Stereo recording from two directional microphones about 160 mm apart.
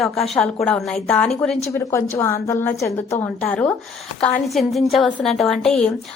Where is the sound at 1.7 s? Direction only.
20° left (ahead or behind).